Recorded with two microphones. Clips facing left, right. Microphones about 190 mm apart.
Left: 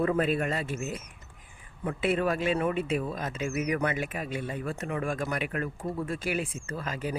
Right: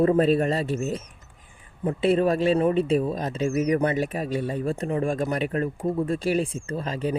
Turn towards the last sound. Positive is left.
turn(degrees=-30)  # may be behind; listen again after turning